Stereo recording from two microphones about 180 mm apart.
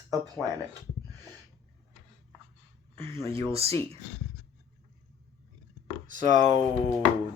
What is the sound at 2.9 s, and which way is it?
Speech, 15° left (ahead or behind).